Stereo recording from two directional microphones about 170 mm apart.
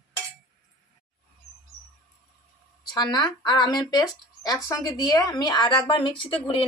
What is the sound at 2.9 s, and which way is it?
Speech, 25° left (ahead or behind).